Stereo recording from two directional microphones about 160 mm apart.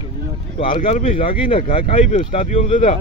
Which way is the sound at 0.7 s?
55° left (ahead or behind).